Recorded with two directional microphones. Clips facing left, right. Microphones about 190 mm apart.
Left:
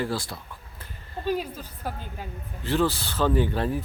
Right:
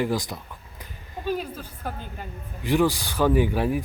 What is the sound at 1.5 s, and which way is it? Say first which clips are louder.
Speech: right 1 dB; 10° right (ahead or behind).